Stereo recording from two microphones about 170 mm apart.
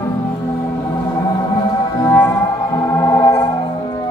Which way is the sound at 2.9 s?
15° left (ahead or behind).